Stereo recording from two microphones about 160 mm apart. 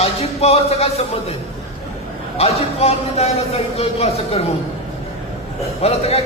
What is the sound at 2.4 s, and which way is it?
A man's voice, 40° left (ahead or behind).